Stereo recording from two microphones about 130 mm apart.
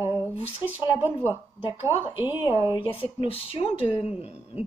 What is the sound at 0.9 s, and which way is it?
A woman's voice, 15° right (ahead or behind).